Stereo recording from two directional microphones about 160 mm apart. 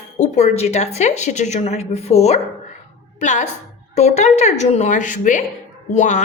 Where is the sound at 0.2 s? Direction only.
45° left (ahead or behind).